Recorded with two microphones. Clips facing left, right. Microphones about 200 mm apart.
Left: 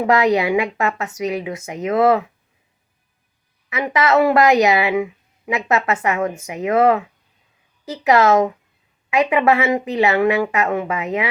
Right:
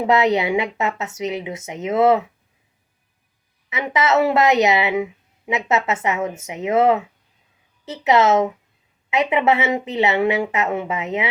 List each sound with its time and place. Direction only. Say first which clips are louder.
0.0 s speech: left 1 dB; 25° right (ahead or behind)
3.7 s speech: left 2 dB; 25° right (ahead or behind)